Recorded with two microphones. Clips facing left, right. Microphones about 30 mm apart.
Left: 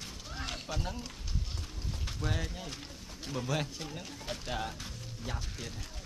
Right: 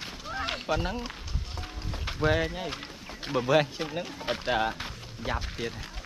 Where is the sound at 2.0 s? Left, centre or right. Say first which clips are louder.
Right 12 dB; right.